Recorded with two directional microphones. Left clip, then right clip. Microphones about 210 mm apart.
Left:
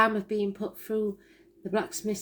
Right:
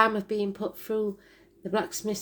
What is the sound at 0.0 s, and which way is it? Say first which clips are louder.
Speech: right 1 dB; 30° right (ahead or behind).